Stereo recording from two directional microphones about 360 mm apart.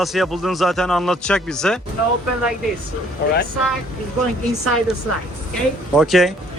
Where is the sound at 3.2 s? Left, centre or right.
Left.